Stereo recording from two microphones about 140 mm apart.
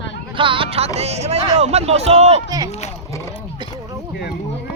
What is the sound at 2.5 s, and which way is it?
Speech, 25° right (ahead or behind).